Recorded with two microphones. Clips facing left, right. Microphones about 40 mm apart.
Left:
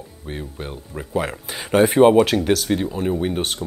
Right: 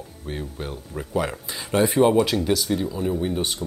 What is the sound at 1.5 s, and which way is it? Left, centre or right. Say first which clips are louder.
Speech: left 6 dB; left.